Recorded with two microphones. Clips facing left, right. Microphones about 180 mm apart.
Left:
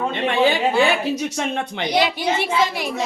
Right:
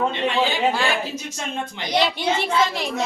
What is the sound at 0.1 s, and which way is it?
A woman's voice, 55° left (ahead or behind).